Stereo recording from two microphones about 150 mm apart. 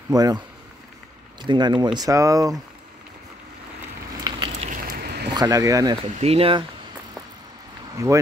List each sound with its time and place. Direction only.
0.1 s speech: 25° right (ahead or behind)
1.4 s speech: 30° right (ahead or behind)
4.2 s a sound: 25° right (ahead or behind)
4.6 s a sound: 80° right
5.3 s speech: 25° right (ahead or behind)
6.0 s speech: 40° right (ahead or behind)
8.0 s speech: 20° right (ahead or behind)